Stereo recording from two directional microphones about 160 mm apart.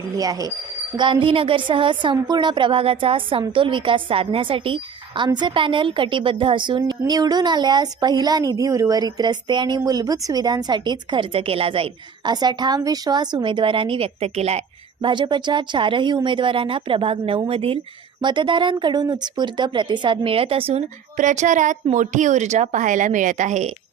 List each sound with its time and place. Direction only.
0.2 s a woman's voice: 25° right (ahead or behind); by 14.6 s 40° right (ahead or behind)
15.0 s a woman's voice: 30° right (ahead or behind)
21.2 s a woman's voice: 50° right (ahead or behind)